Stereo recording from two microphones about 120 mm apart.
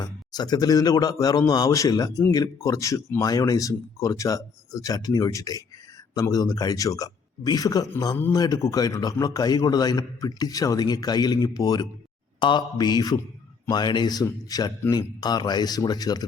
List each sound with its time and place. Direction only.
0.0 s a man's voice: 35° left (ahead or behind)